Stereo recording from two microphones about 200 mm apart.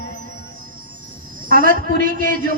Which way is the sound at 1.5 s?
45° right (ahead or behind).